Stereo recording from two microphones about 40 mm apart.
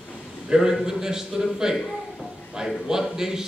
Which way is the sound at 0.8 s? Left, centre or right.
Centre.